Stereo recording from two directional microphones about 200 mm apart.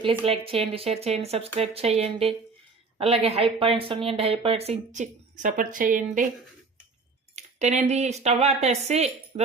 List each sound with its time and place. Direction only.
0.0 s speech: 25° right (ahead or behind)
7.3 s speech: 35° right (ahead or behind)